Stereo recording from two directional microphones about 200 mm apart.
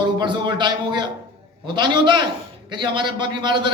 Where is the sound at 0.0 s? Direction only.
20° right (ahead or behind).